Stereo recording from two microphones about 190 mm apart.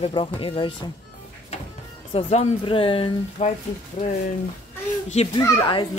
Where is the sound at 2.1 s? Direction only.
30° left (ahead or behind).